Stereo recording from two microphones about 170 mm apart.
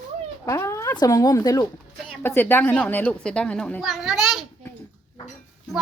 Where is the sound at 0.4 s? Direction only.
15° left (ahead or behind); by 4.4 s centre (ahead or behind).